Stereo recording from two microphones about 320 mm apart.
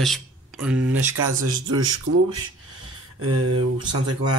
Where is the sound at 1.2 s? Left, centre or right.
Right.